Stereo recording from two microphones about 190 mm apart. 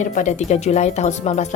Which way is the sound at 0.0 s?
40° left (ahead or behind).